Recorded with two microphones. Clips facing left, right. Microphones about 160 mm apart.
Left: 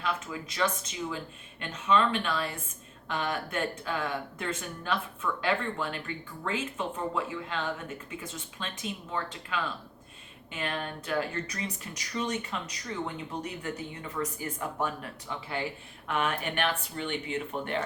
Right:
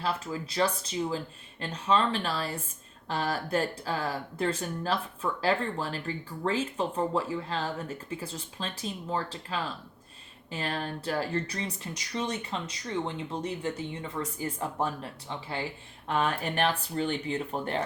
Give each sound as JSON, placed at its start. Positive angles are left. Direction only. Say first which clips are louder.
{"t": 0.0, "sound": "speech", "louder": "right 2 dB", "side_deg": -35}